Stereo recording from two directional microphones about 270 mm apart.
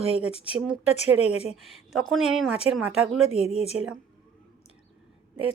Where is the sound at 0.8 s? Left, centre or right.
Left.